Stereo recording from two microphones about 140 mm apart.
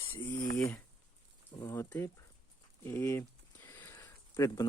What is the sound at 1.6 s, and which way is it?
Speech, 20° left (ahead or behind).